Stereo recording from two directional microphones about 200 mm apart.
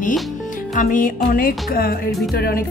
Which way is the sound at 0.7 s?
40° left (ahead or behind).